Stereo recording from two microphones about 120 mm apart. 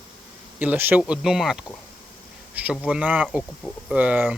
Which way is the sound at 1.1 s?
5° right (ahead or behind).